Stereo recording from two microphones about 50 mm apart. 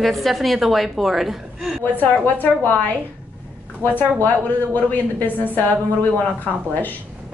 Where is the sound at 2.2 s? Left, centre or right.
Left.